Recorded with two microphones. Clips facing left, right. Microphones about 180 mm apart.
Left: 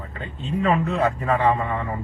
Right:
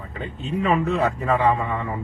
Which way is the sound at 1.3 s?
Centre (ahead or behind).